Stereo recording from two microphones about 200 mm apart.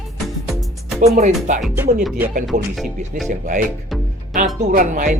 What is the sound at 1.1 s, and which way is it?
Speech, 40° right (ahead or behind).